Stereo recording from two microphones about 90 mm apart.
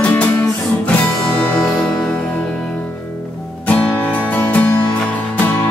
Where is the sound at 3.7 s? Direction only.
15° left (ahead or behind).